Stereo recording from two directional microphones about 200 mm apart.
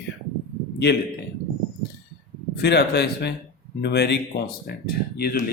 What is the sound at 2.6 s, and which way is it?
Speech, 55° left (ahead or behind).